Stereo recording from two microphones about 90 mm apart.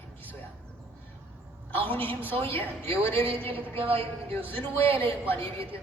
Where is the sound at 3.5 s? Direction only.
90° right.